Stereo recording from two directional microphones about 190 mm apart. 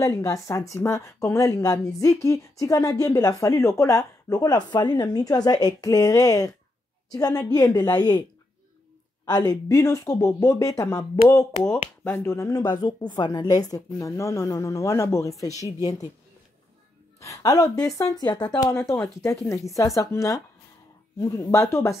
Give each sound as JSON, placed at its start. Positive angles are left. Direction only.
{"t": 0.0, "sound": "a woman's voice", "side_deg": 15}
{"t": 9.5, "sound": "speech", "side_deg": 15}
{"t": 17.2, "sound": "a woman's voice", "side_deg": 20}